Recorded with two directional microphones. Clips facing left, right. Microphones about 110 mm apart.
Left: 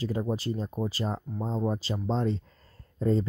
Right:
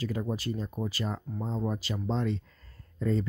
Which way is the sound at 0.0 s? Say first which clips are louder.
Left 2 dB; 25° left (ahead or behind).